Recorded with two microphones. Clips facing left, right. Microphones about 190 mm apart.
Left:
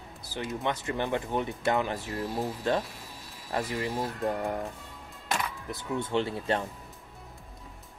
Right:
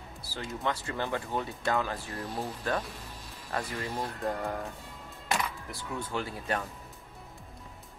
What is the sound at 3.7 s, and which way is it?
Speech, 10° left (ahead or behind).